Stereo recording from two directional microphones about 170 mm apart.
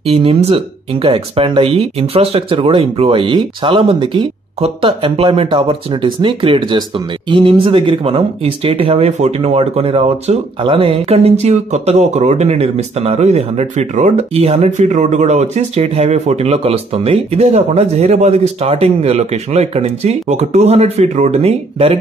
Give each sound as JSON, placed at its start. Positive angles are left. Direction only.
{"t": 0.0, "sound": "speech", "side_deg": -35}